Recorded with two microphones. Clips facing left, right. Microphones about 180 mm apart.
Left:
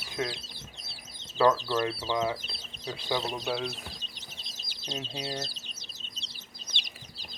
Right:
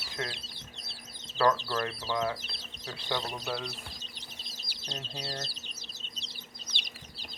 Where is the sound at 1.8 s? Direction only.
5° left (ahead or behind).